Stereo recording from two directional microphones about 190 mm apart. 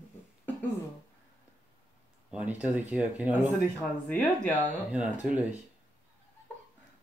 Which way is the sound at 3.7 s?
10° left (ahead or behind).